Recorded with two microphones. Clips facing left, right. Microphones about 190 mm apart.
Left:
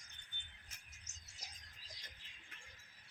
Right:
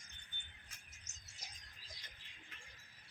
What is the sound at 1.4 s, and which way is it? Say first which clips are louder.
Bird: even; 35° left (ahead or behind).